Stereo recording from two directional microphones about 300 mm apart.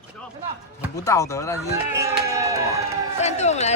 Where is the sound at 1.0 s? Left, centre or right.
Centre.